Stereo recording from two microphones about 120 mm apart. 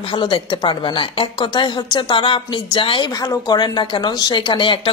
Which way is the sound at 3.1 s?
30° left (ahead or behind).